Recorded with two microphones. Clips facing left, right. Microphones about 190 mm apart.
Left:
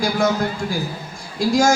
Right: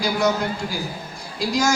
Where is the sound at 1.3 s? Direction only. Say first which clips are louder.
Left 5 dB; 50° left (ahead or behind).